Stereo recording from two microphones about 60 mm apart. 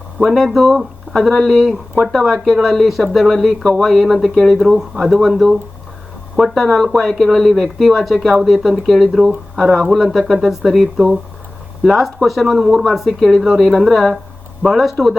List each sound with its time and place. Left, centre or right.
0.2 s speech: centre
10.9 s speech: centre
11.8 s speech: centre